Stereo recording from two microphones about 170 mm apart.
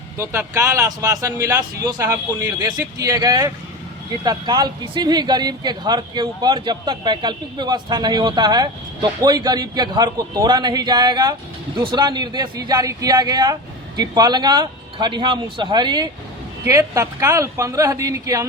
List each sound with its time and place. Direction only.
0.2 s a woman's voice: 15° right (ahead or behind)